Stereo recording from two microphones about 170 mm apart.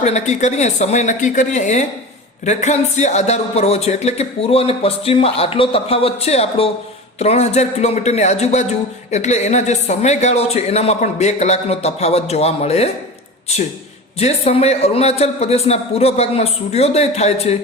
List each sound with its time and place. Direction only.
0.0 s a woman's voice: 40° left (ahead or behind)
14.2 s a man's voice: 40° left (ahead or behind)